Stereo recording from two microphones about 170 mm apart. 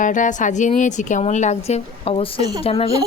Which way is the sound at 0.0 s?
50° left (ahead or behind).